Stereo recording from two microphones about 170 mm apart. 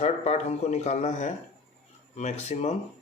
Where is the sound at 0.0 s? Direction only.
40° left (ahead or behind).